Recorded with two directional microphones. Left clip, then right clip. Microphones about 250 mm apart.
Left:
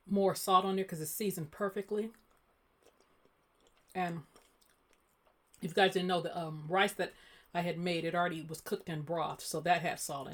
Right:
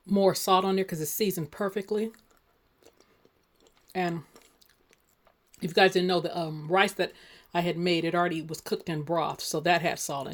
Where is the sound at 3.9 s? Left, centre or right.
Right.